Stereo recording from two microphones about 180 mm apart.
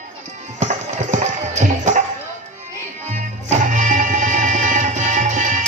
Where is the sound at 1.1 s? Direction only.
40° right (ahead or behind).